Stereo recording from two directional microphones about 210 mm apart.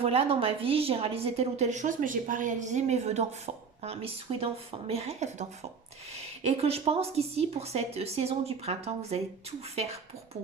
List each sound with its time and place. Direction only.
0.0 s a woman's voice: 25° right (ahead or behind)